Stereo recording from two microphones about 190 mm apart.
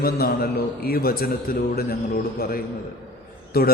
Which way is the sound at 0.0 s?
50° left (ahead or behind).